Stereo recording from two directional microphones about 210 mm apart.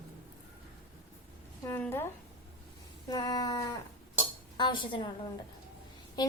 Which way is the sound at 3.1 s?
20° left (ahead or behind).